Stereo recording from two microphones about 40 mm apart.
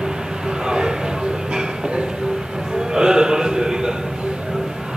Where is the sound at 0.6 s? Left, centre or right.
Centre.